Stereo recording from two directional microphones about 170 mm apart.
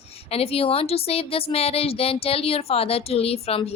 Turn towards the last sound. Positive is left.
turn(degrees=35)  # may be behind; listen again after turning